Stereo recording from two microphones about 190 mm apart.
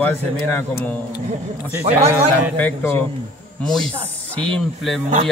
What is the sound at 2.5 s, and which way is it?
Speech, 10° left (ahead or behind).